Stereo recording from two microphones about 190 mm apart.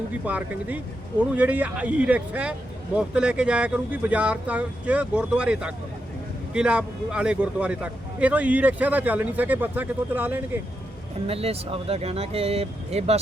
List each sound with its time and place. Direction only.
0.3 s speech: 5° right (ahead or behind)
11.3 s speech: 30° right (ahead or behind)